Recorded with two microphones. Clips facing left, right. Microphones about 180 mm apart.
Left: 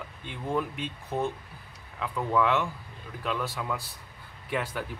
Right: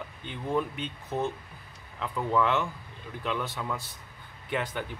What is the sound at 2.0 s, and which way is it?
Speech, centre (ahead or behind).